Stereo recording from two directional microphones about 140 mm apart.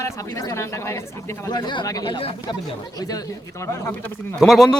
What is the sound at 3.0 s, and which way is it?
Speech, 25° left (ahead or behind).